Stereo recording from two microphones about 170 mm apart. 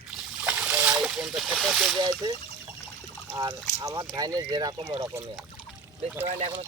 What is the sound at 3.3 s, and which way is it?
Speech, 20° right (ahead or behind).